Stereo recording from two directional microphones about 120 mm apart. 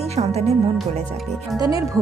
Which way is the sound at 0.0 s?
60° right (ahead or behind).